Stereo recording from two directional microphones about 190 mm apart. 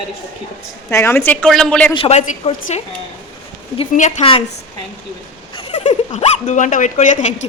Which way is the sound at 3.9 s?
35° left (ahead or behind).